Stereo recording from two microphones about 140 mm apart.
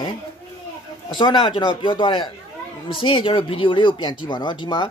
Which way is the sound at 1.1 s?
35° left (ahead or behind).